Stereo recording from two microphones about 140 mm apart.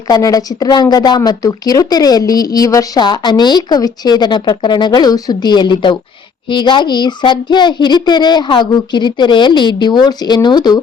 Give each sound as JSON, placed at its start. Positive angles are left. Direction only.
{"t": 0.1, "sound": "speech", "side_deg": 25}